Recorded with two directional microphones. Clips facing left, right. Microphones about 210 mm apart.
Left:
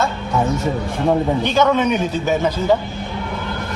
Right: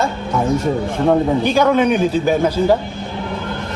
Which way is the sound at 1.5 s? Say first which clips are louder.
Right 2 dB; 10° right (ahead or behind).